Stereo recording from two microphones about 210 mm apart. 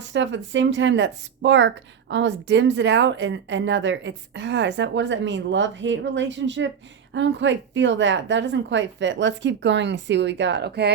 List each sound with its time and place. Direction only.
0.0 s speech: 60° right (ahead or behind)